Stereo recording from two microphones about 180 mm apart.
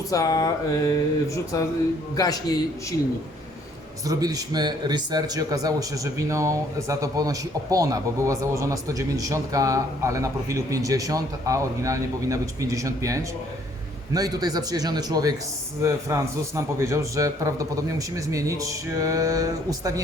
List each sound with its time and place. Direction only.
0.1 s mantra: 20° left (ahead or behind)
4.0 s a man's voice: 20° right (ahead or behind)